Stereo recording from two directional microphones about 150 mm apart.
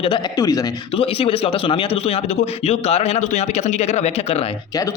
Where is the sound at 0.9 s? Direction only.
40° left (ahead or behind).